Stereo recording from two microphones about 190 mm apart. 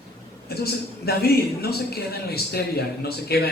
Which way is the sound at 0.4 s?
55° left (ahead or behind).